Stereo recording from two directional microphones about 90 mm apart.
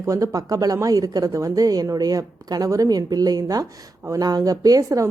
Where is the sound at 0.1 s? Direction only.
40° right (ahead or behind).